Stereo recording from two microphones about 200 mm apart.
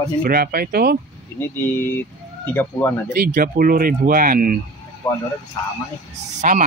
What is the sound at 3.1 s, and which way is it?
Speech, 45° right (ahead or behind).